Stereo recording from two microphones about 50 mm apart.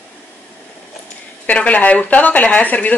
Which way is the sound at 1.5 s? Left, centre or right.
Left.